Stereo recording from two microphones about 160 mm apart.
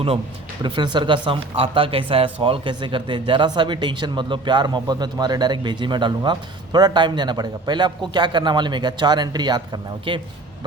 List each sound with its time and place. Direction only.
0.6 s speech: 30° right (ahead or behind)